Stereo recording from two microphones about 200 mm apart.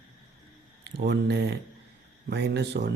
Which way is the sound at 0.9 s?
55° right (ahead or behind).